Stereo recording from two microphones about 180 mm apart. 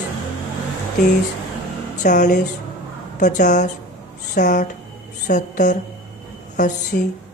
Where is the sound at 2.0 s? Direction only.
45° left (ahead or behind).